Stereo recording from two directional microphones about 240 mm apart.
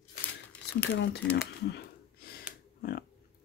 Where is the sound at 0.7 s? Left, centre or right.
Left.